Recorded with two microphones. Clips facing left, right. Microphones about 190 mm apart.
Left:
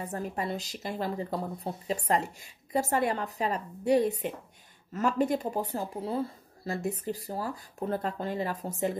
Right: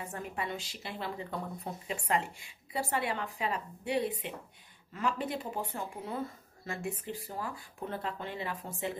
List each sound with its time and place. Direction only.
0.0 s speech: 35° left (ahead or behind)